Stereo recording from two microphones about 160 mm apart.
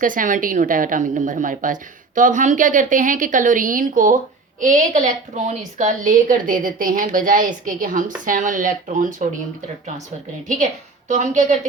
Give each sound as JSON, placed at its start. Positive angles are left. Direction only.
{"t": 0.0, "sound": "a woman's voice", "side_deg": -55}
{"t": 11.1, "sound": "speech", "side_deg": -50}